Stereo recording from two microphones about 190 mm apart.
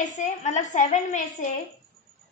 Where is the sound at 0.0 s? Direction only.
40° left (ahead or behind).